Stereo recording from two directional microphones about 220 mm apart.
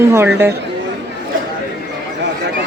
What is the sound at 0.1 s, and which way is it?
Speech, 10° right (ahead or behind).